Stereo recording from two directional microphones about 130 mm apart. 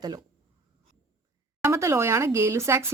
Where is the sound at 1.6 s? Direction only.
20° right (ahead or behind).